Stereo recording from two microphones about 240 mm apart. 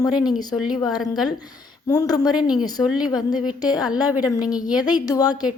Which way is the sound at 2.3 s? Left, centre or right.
Centre.